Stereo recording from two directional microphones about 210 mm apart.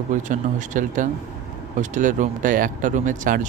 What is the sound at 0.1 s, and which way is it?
Speech, 35° right (ahead or behind).